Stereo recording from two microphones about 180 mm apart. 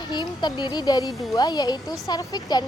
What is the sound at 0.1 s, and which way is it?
Speech, 25° left (ahead or behind).